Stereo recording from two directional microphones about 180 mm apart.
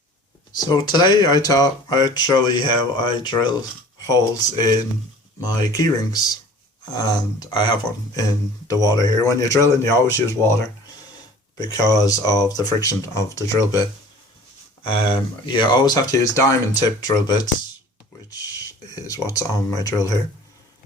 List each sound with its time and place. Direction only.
0.5 s speech: 20° left (ahead or behind)
5.7 s speech: 20° left (ahead or behind)
11.6 s speech: 20° left (ahead or behind)
14.8 s speech: 25° left (ahead or behind)